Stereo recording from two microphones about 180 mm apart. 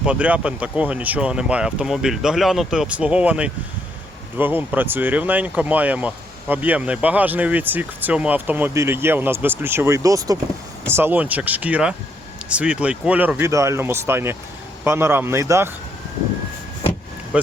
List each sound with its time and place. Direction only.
0.0 s speech: 5° right (ahead or behind)